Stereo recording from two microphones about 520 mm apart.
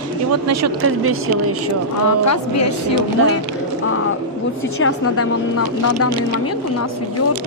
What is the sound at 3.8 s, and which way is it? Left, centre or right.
Speech, left.